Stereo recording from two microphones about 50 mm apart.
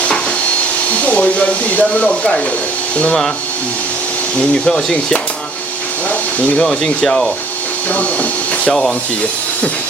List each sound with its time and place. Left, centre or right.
1.0 s speech: left
4.4 s speech: centre
6.6 s speech: centre
7.9 s speech: left